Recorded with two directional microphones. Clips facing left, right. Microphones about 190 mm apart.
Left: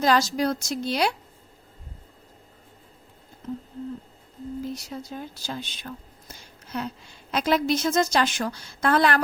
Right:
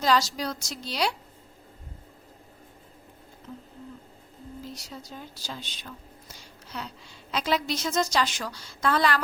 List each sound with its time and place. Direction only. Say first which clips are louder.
0.0 s a woman's voice: left 3 dB; 50° left (ahead or behind)
4.7 s a woman's voice: left 7 dB; 55° left (ahead or behind)